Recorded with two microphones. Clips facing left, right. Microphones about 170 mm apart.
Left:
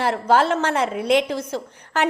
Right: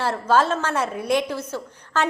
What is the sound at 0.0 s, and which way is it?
A woman's voice, 15° left (ahead or behind).